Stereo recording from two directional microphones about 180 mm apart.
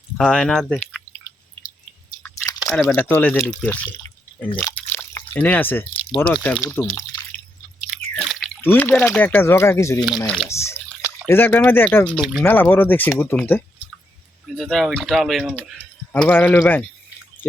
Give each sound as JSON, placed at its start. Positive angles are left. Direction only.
{"t": 0.2, "sound": "speech", "side_deg": 5}
{"t": 2.2, "sound": "chewing", "side_deg": 15}
{"t": 2.9, "sound": "speech", "side_deg": 10}
{"t": 4.6, "sound": "drip", "side_deg": 10}
{"t": 6.1, "sound": "speech", "side_deg": 10}
{"t": 8.1, "sound": "speech", "side_deg": 5}
{"t": 10.2, "sound": "speech", "side_deg": 0}
{"t": 10.5, "sound": "speech", "side_deg": 15}